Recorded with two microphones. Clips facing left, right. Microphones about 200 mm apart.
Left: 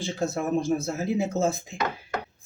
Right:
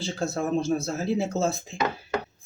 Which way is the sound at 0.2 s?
15° left (ahead or behind).